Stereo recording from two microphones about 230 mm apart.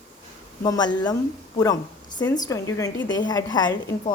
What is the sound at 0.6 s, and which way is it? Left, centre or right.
Speech, centre.